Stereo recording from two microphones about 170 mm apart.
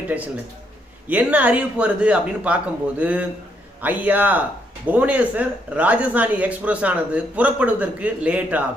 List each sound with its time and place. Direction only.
0.1 s speech: 10° right (ahead or behind)